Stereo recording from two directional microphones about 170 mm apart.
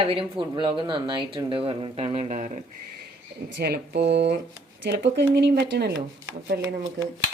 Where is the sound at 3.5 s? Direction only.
70° right (ahead or behind).